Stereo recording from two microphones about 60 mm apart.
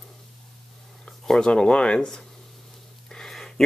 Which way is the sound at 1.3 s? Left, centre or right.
Centre.